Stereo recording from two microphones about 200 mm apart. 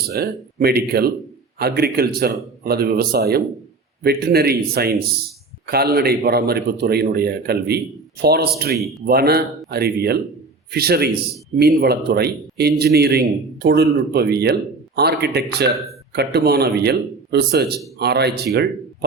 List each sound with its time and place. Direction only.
0.1 s a man's voice: 50° right (ahead or behind)
8.8 s speech: centre (ahead or behind)
9.0 s a man's voice: 50° right (ahead or behind)